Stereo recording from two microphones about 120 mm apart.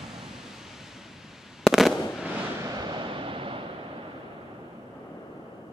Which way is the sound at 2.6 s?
35° right (ahead or behind).